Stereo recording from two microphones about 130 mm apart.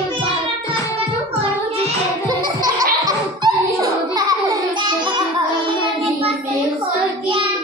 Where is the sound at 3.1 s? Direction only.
25° right (ahead or behind).